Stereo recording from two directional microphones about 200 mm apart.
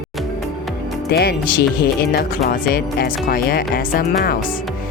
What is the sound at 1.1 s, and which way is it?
Speech, 50° left (ahead or behind).